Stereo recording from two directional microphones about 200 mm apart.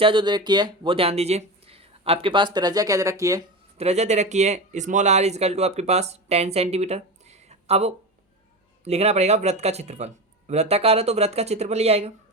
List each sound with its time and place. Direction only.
0.0 s speech: 25° right (ahead or behind)
3.8 s speech: 35° right (ahead or behind)